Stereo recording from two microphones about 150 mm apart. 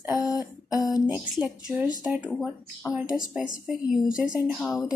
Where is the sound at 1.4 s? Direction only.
10° right (ahead or behind).